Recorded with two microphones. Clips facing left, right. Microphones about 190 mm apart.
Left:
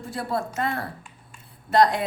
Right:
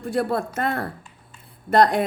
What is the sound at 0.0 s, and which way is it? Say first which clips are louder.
A woman's voice: right 5 dB; 60° right (ahead or behind).